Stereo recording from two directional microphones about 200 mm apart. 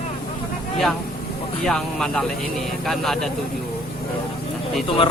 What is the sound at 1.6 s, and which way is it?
Speech, 5° left (ahead or behind).